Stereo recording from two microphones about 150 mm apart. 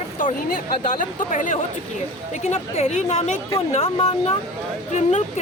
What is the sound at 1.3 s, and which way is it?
Speech, 55° left (ahead or behind).